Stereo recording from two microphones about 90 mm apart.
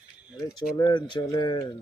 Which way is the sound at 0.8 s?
55° left (ahead or behind).